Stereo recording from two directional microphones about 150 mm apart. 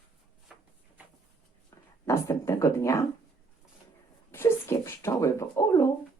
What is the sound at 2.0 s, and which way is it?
A woman's voice, 20° left (ahead or behind).